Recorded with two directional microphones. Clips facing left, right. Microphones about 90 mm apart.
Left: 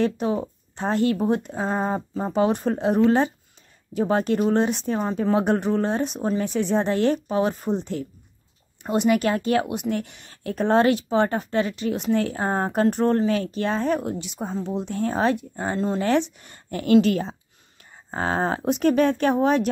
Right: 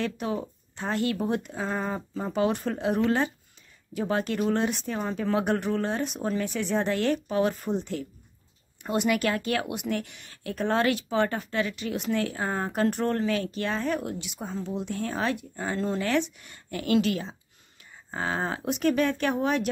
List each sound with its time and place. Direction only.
0.0 s speech: 30° left (ahead or behind)